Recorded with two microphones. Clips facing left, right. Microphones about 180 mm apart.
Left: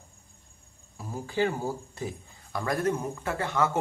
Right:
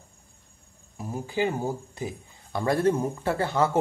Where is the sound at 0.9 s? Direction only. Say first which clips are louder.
Right 1 dB; 20° right (ahead or behind).